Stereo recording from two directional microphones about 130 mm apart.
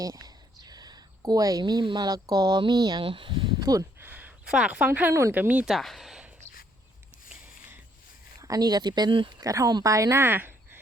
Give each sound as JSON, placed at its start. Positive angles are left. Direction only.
{"t": 0.0, "sound": "a sound", "side_deg": -30}
{"t": 2.3, "sound": "speech", "side_deg": -30}
{"t": 4.0, "sound": "speech", "side_deg": -15}
{"t": 5.7, "sound": "a sound", "side_deg": 0}
{"t": 8.4, "sound": "speech", "side_deg": -25}
{"t": 9.4, "sound": "speech", "side_deg": -25}